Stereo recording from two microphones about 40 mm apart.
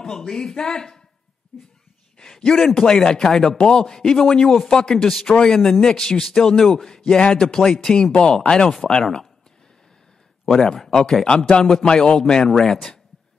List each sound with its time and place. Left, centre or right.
0.0 s a man's voice: centre
1.5 s speech: left
2.3 s a man's voice: centre
3.5 s speech: left
3.8 s a man's voice: centre
6.7 s speech: centre
7.1 s a man's voice: centre
10.5 s a man's voice: centre